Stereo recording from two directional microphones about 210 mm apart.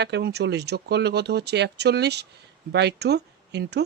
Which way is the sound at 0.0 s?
50° right (ahead or behind).